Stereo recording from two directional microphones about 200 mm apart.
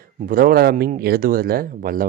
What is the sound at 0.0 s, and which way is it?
Speech, 45° right (ahead or behind).